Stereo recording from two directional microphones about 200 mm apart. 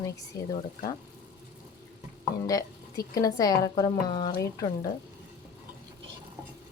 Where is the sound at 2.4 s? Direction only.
20° left (ahead or behind).